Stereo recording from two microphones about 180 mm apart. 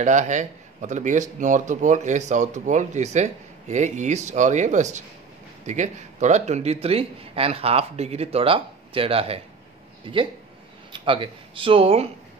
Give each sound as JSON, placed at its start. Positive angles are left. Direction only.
{"t": 0.0, "sound": "a man's voice", "side_deg": -45}